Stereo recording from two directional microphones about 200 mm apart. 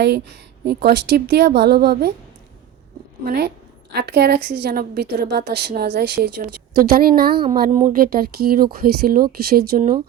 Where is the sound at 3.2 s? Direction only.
50° right (ahead or behind).